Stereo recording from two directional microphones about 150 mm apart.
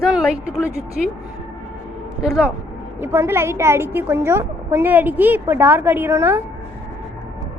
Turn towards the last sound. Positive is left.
turn(degrees=-15)  # may be behind; listen again after turning